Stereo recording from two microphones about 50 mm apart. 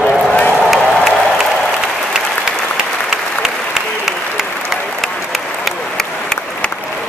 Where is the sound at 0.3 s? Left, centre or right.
Left.